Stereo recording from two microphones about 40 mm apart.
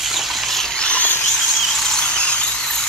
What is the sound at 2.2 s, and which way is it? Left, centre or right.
Vehicle, left.